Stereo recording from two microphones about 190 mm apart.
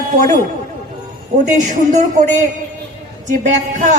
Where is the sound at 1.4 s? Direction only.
40° right (ahead or behind).